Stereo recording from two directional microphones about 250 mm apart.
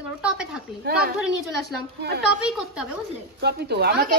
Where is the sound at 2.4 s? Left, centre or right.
Centre.